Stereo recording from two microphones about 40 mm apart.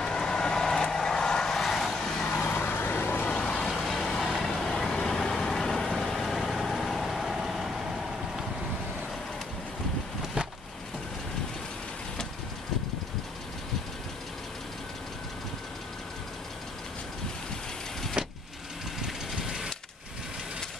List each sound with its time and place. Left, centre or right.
0.0 s vehicle: centre
1.7 s vehicle: centre
2.0 s vehicle: centre
2.6 s vehicle: left
3.3 s vehicle: centre
18.2 s vehicle: right